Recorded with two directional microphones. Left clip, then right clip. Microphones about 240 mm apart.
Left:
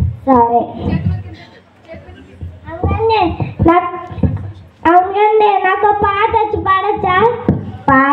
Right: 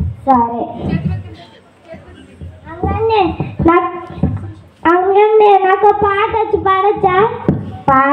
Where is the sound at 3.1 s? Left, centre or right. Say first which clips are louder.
Even; right.